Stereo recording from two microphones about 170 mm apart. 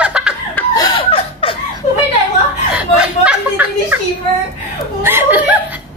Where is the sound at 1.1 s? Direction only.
35° left (ahead or behind).